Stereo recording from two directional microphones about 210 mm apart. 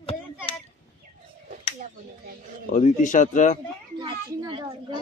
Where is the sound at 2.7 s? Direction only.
35° left (ahead or behind).